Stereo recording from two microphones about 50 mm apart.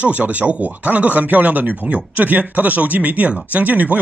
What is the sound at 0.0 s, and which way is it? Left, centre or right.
Speech, right.